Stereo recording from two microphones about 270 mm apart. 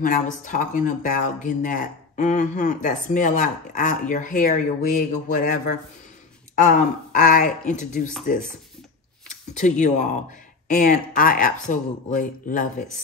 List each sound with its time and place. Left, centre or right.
0.0 s speech: left
9.3 s speech: left